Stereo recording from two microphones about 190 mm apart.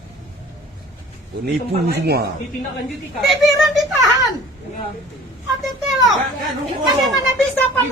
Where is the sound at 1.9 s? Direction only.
55° right (ahead or behind).